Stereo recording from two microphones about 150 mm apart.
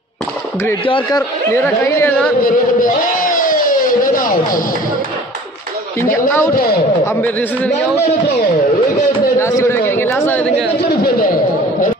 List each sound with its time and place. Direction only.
0.8 s speech: 35° left (ahead or behind)
1.5 s speech: 15° left (ahead or behind)
2.4 s speech: 65° left (ahead or behind)
6.5 s speech: 85° left
7.2 s speech: 10° left (ahead or behind)
9.4 s speech: 20° left (ahead or behind)
10.9 s speech: 80° left